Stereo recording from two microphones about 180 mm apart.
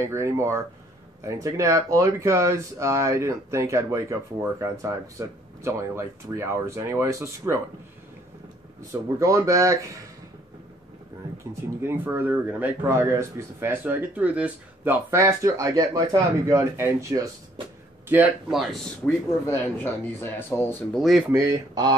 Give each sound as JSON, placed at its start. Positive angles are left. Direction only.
{"t": 0.0, "sound": "speech", "side_deg": -15}
{"t": 9.2, "sound": "speech", "side_deg": -15}
{"t": 11.8, "sound": "speech", "side_deg": -10}
{"t": 18.0, "sound": "speech", "side_deg": -5}
{"t": 19.0, "sound": "speech", "side_deg": 10}
{"t": 21.0, "sound": "speech", "side_deg": 0}
{"t": 21.3, "sound": "speech", "side_deg": -15}